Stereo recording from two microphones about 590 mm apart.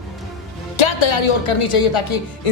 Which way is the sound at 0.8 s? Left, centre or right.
Left.